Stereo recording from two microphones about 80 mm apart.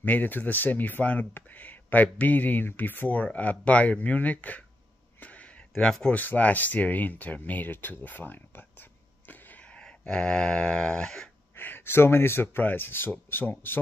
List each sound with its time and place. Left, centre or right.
0.0 s speech: left
5.2 s a sound: centre
6.1 s speech: centre
11.5 s speech: left